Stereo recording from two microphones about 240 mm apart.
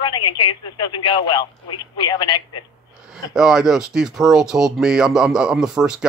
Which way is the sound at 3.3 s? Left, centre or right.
Centre.